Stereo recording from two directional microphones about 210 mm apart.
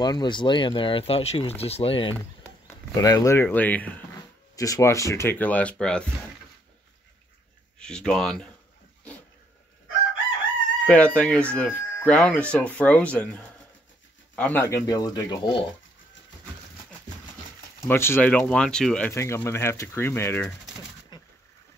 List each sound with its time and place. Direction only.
0.0 s speech: 20° left (ahead or behind); by 6.0 s 5° left (ahead or behind)
7.8 s speech: 5° left (ahead or behind)
10.9 s speech: 5° left (ahead or behind)
17.8 s speech: 10° left (ahead or behind)
21.1 s a sound: 20° left (ahead or behind)